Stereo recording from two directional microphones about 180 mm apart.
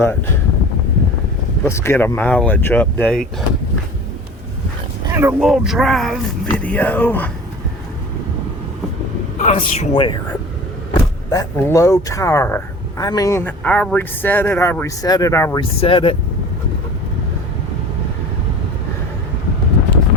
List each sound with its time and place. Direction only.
1.6 s speech: 15° left (ahead or behind)
5.0 s dog: 15° right (ahead or behind)
5.4 s speech: centre (ahead or behind)
9.4 s a man's voice: 40° left (ahead or behind)
9.9 s speech: 30° left (ahead or behind)
11.3 s speech: 20° left (ahead or behind)
15.6 s a man's voice: 30° left (ahead or behind)